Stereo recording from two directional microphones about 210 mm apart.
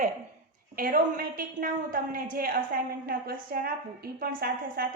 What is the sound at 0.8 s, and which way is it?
A woman's voice, 45° right (ahead or behind).